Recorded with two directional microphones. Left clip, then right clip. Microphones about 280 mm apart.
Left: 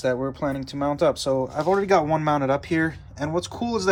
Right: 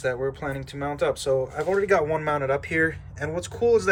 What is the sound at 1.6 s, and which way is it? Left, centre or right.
Speech, left.